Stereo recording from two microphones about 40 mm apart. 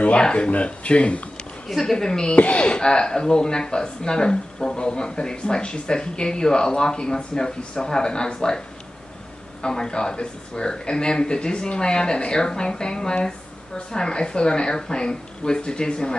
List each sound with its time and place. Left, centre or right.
0.2 s speech: left
1.7 s a woman's voice: centre
2.3 s speech: left